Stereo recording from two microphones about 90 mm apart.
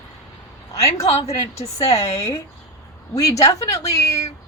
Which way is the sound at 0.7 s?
35° left (ahead or behind).